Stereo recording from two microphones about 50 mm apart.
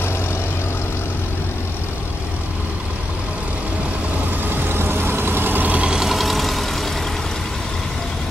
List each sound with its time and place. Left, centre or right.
4.6 s vehicle: right
5.8 s vehicle: centre
6.0 s vehicle: centre